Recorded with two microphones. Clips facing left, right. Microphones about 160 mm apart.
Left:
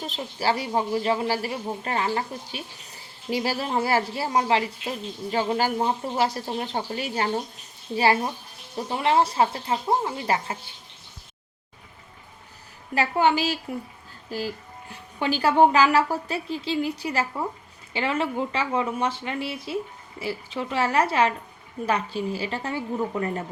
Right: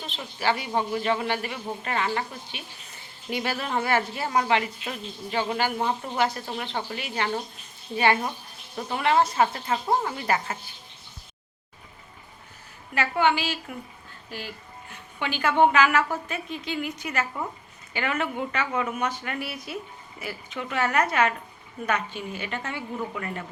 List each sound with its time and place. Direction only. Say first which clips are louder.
0.0 s speech: left 2 dB; 40° left (ahead or behind)
12.9 s speech: left 2 dB; 35° left (ahead or behind)